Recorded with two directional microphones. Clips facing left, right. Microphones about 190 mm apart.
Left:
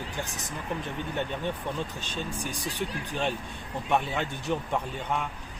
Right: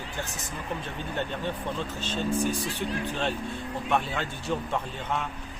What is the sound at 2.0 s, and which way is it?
Speech, 15° left (ahead or behind).